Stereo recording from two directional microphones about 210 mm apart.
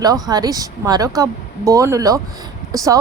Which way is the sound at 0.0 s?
20° right (ahead or behind).